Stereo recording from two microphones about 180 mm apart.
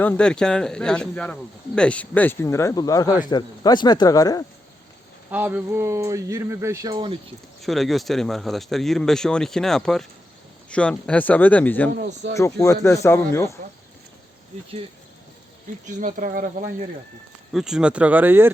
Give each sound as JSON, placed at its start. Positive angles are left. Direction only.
{"t": 0.0, "sound": "speech", "side_deg": 5}
{"t": 5.3, "sound": "speech", "side_deg": -10}
{"t": 7.6, "sound": "speech", "side_deg": 0}
{"t": 11.9, "sound": "speech", "side_deg": -75}
{"t": 12.3, "sound": "speech", "side_deg": 15}
{"t": 15.9, "sound": "speech", "side_deg": -45}
{"t": 17.5, "sound": "speech", "side_deg": 0}